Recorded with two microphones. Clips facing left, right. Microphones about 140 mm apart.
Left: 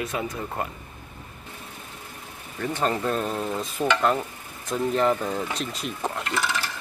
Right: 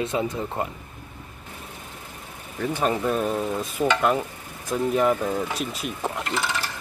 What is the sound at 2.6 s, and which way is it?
Speech, 10° right (ahead or behind).